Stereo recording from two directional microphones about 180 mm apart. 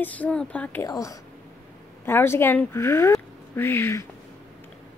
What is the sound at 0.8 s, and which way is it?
Speech, 20° left (ahead or behind).